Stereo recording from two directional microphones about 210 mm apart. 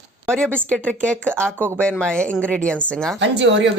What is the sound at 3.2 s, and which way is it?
Speech, 55° right (ahead or behind).